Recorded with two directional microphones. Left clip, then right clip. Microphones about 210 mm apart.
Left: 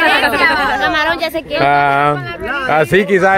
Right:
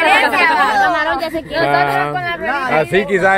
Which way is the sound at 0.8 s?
60° left (ahead or behind).